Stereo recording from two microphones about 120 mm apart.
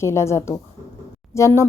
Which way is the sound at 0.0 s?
25° left (ahead or behind).